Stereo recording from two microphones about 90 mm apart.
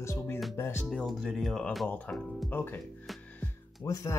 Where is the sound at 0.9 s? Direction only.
5° left (ahead or behind).